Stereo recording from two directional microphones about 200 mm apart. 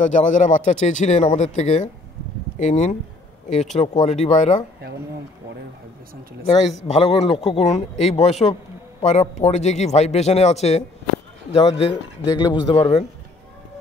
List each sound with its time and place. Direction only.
0.0 s speech: 40° left (ahead or behind)
6.8 s speech: 30° left (ahead or behind)